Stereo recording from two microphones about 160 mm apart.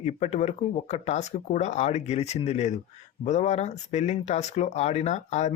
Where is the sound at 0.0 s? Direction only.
45° left (ahead or behind).